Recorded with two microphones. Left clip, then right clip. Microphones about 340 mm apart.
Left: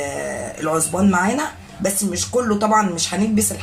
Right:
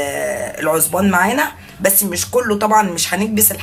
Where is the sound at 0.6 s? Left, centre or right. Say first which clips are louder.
Right 3 dB; right.